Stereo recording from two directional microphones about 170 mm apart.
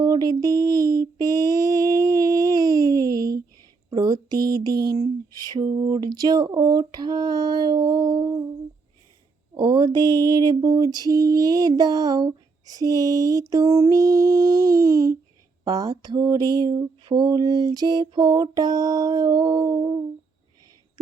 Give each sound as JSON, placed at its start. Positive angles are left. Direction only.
{"t": 0.0, "sound": "mantra", "side_deg": -20}
{"t": 9.6, "sound": "mantra", "side_deg": -25}